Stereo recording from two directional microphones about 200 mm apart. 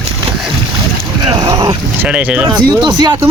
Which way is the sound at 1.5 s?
20° right (ahead or behind).